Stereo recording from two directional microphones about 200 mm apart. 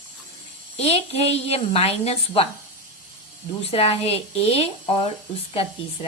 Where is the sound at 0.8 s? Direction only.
30° left (ahead or behind).